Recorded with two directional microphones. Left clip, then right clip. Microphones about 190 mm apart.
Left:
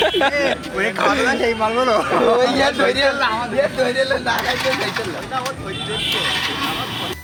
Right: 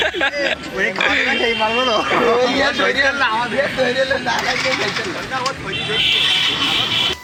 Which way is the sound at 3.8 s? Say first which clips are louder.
Right 1 dB; 25° left (ahead or behind).